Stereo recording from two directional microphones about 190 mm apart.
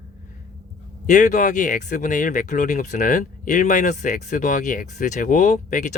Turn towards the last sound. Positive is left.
turn(degrees=40)  # may be behind; listen again after turning